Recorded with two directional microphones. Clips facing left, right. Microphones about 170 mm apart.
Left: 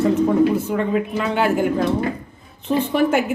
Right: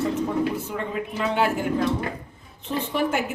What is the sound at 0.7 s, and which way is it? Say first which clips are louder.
Speech: left 8 dB; 65° left (ahead or behind).